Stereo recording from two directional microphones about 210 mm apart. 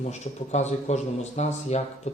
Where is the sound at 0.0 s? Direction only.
30° left (ahead or behind).